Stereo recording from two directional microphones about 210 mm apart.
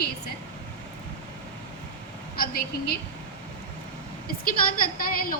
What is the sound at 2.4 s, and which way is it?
Speech, 45° left (ahead or behind).